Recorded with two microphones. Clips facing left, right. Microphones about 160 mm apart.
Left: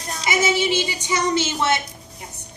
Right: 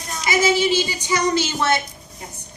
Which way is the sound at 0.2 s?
25° left (ahead or behind).